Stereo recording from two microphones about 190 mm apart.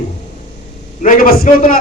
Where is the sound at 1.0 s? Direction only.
45° left (ahead or behind).